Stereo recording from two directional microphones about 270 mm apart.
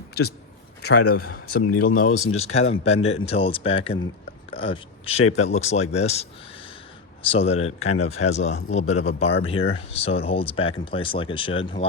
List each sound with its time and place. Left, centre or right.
0.8 s a man's voice: left
1.1 s speech: left
7.3 s speech: left